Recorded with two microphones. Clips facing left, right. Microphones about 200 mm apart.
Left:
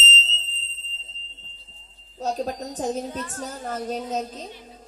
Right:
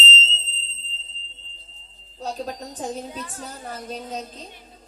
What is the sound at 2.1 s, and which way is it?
A woman's voice, 40° left (ahead or behind).